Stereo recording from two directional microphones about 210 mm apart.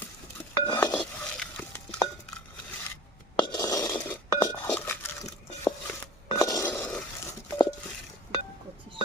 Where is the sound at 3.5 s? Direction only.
15° left (ahead or behind).